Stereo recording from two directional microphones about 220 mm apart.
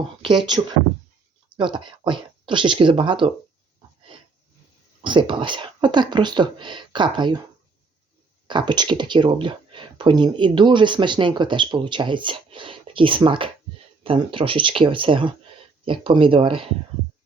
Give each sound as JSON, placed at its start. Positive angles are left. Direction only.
{"t": 0.2, "sound": "speech", "side_deg": -20}
{"t": 5.0, "sound": "speech", "side_deg": -20}
{"t": 8.4, "sound": "speech", "side_deg": -20}